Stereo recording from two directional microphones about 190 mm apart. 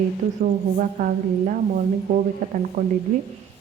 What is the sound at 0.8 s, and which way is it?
A woman's voice, 45° right (ahead or behind).